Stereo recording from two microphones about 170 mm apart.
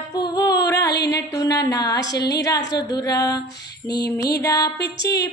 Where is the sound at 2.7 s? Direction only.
20° left (ahead or behind).